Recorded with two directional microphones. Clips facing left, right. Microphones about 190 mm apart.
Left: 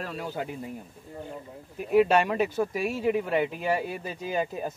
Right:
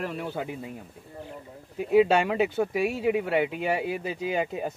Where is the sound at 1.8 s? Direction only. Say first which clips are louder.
Right 1 dB; 20° right (ahead or behind).